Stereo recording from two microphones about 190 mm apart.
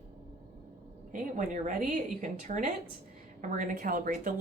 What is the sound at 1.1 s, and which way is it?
Speech, 45° right (ahead or behind).